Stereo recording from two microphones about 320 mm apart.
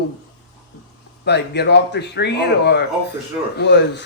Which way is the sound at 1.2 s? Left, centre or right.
Left.